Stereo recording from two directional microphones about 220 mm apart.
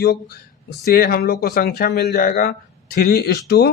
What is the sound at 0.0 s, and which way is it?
Speech, 45° left (ahead or behind).